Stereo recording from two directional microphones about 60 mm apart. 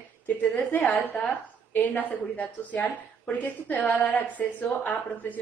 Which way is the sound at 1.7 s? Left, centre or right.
Left.